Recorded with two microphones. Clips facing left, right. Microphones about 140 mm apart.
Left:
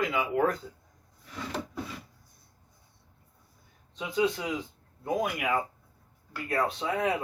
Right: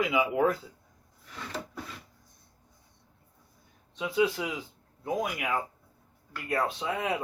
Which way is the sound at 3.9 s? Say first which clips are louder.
Right 1 dB; 5° right (ahead or behind).